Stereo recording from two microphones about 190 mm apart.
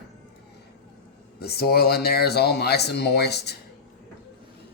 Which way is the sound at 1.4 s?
55° left (ahead or behind).